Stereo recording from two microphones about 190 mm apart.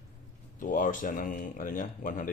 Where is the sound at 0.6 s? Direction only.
45° left (ahead or behind).